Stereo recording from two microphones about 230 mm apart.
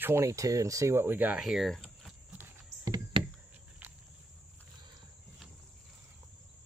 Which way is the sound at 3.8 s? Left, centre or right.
Centre.